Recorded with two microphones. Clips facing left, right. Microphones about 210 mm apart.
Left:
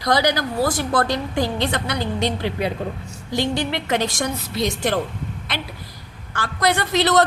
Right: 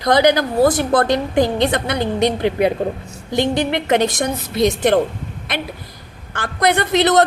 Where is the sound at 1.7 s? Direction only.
50° right (ahead or behind).